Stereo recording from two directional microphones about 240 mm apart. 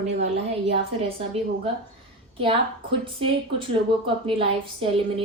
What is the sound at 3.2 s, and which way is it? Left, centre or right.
A woman's voice, right.